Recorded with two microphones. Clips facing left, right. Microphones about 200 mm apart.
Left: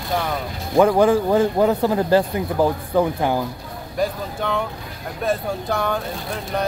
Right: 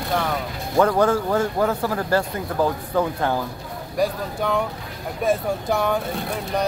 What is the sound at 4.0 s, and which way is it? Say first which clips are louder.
Speech: right 1 dB; 5° right (ahead or behind).